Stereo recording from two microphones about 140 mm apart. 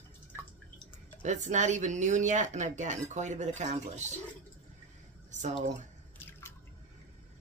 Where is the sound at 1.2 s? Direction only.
60° right (ahead or behind).